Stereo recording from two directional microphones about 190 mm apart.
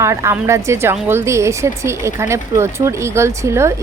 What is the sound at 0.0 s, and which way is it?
Speech, 15° right (ahead or behind).